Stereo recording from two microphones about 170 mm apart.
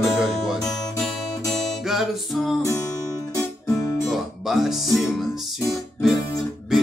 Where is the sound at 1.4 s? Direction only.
Centre (ahead or behind).